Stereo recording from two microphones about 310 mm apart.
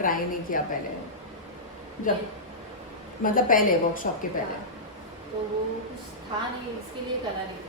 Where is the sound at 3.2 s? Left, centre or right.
Left.